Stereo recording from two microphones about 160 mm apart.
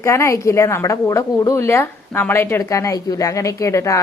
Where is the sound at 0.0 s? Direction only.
15° left (ahead or behind).